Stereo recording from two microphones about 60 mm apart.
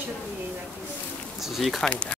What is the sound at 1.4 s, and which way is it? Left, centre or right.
Speech, centre.